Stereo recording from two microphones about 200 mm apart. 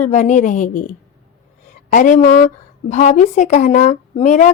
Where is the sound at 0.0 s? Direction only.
35° left (ahead or behind).